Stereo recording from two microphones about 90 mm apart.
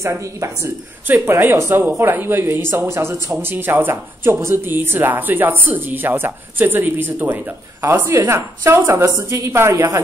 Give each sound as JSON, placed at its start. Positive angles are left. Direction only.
{"t": 0.0, "sound": "a woman's voice", "side_deg": -35}